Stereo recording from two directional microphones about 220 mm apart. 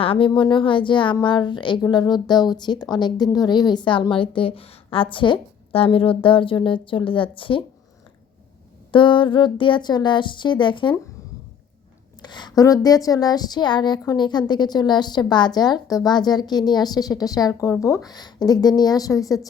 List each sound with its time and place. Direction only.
0.0 s speech: 25° left (ahead or behind)
8.9 s speech: 20° left (ahead or behind)
12.2 s a woman's voice: 20° left (ahead or behind)